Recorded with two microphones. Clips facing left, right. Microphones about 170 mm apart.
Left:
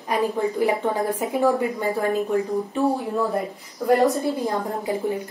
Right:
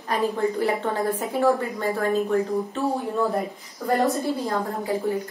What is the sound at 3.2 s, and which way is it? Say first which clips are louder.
Speech: even; centre (ahead or behind).